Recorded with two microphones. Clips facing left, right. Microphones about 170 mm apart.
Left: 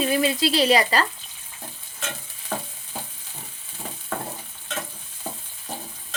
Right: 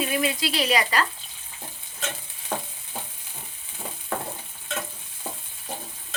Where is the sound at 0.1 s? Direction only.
30° left (ahead or behind).